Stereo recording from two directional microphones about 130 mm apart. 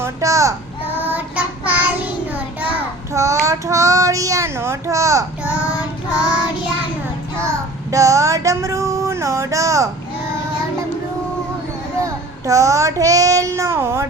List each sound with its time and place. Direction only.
0.0 s child singing: 25° right (ahead or behind)
3.1 s child singing: 25° right (ahead or behind)
7.4 s child singing: 25° right (ahead or behind)
12.0 s child singing: 25° right (ahead or behind)